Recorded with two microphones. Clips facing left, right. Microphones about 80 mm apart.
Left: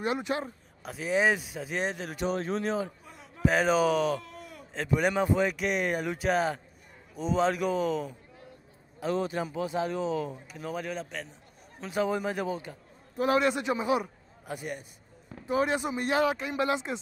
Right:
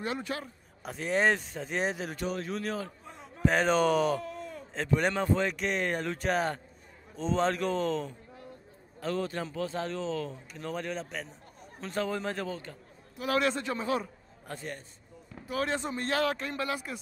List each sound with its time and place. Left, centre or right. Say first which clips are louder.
0.0 s speech: left 4 dB; centre
0.8 s a man's voice: left 1 dB; centre
2.2 s speech: left 5 dB; left
3.1 s a man's voice: even; centre
11.8 s speech: left 3 dB; centre
13.2 s a man's voice: left 7 dB; left
13.5 s a man's voice: left 3 dB; centre
16.5 s speech: left 5 dB; left